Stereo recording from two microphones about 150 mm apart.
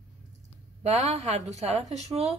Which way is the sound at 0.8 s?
45° right (ahead or behind).